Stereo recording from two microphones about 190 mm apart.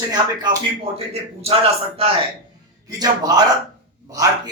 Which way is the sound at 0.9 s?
35° right (ahead or behind).